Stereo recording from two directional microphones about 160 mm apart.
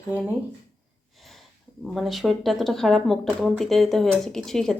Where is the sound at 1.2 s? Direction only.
Centre (ahead or behind).